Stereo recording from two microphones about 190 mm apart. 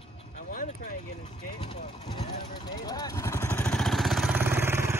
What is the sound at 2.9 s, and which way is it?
Speech, 15° left (ahead or behind).